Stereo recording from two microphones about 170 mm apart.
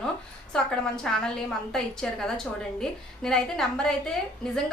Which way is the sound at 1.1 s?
5° left (ahead or behind).